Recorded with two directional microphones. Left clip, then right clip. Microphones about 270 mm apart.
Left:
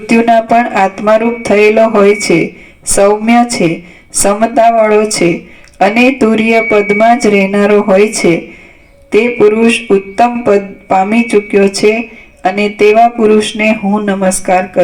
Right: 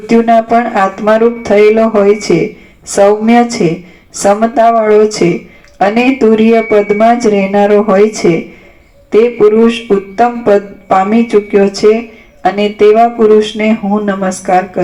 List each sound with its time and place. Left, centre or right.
0.1 s speech: left
9.6 s speech: left